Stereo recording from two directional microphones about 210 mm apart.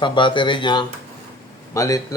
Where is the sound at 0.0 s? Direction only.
25° left (ahead or behind).